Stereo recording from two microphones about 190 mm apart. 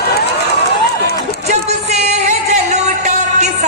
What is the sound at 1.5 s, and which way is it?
Music, 35° right (ahead or behind).